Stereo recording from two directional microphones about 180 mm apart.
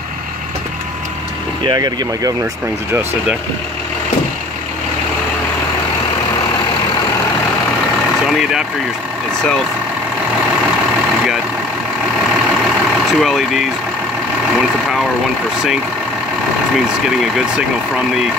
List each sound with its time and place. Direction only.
1.6 s speech: 20° right (ahead or behind)
8.3 s speech: centre (ahead or behind)
13.1 s speech: centre (ahead or behind)
16.7 s speech: centre (ahead or behind)